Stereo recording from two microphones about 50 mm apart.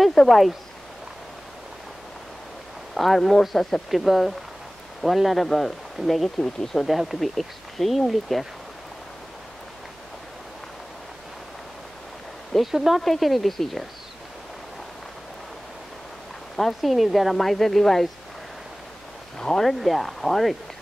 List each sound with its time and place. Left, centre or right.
0.0 s speech: centre
2.9 s speech: centre
12.5 s speech: centre
16.5 s speech: centre
19.3 s speech: centre